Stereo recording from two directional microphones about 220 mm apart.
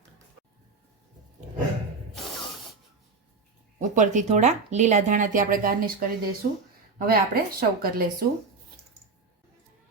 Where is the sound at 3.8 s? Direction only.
35° right (ahead or behind).